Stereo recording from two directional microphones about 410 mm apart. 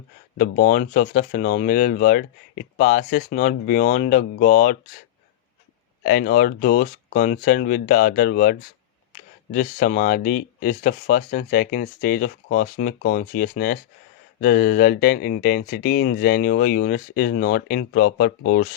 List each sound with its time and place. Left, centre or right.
0.3 s speech: centre
6.0 s speech: left